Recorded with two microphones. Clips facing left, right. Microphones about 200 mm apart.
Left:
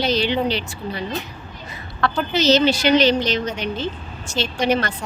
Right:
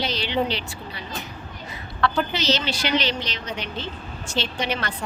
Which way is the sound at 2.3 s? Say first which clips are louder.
Left 9 dB; 45° left (ahead or behind).